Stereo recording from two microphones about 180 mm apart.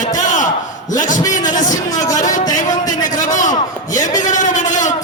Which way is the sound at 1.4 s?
45° left (ahead or behind).